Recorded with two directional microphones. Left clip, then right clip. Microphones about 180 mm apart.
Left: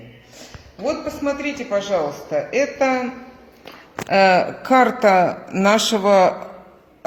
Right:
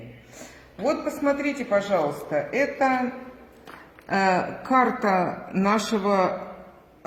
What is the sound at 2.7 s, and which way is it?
Speech, 35° left (ahead or behind).